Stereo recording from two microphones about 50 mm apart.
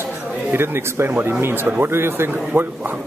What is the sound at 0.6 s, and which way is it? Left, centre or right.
Speech, right.